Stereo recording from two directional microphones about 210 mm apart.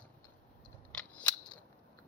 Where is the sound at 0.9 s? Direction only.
5° left (ahead or behind).